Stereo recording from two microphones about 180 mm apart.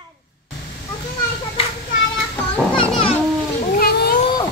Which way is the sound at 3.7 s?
55° left (ahead or behind).